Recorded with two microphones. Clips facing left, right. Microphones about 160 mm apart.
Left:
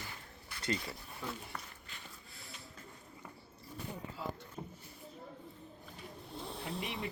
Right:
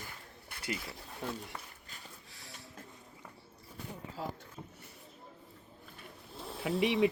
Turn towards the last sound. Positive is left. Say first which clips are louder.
# right 12 dB
turn(degrees=-90)